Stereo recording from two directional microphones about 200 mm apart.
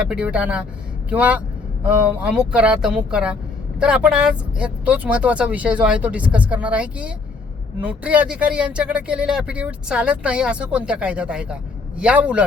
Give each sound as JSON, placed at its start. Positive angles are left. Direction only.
{"t": 0.0, "sound": "speech", "side_deg": -5}